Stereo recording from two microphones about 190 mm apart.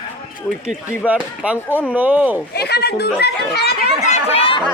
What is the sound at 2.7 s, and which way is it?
Speech, 60° left (ahead or behind).